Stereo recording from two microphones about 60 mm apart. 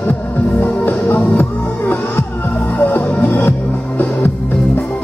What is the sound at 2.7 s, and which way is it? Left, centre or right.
Music, left.